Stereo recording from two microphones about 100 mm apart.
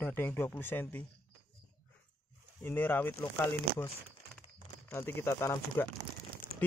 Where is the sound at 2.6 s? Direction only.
20° left (ahead or behind).